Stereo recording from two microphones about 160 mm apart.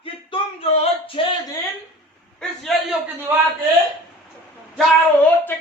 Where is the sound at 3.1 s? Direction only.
15° right (ahead or behind).